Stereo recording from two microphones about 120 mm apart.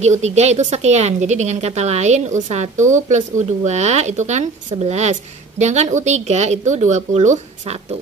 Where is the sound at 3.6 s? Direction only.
70° right (ahead or behind).